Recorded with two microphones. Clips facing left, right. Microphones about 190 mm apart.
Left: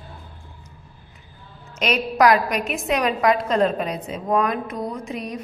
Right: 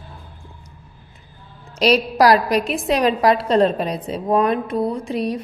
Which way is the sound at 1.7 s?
35° right (ahead or behind).